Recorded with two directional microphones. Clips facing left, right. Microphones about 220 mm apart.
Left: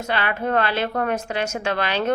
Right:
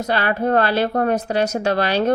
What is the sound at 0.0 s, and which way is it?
Speech, 40° right (ahead or behind).